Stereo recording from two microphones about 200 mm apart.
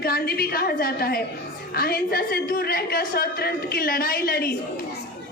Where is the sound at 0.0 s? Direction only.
50° left (ahead or behind).